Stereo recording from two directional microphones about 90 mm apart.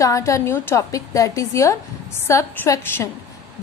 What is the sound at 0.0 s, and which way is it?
A woman's voice, 35° left (ahead or behind).